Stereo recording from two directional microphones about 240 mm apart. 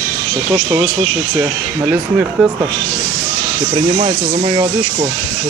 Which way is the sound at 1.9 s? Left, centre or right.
Centre.